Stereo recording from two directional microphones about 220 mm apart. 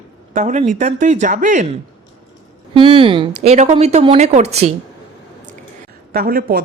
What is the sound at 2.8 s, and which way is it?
Speech, 25° right (ahead or behind).